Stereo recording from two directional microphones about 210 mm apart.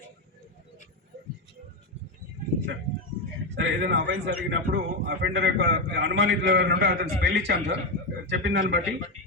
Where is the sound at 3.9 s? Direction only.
55° right (ahead or behind).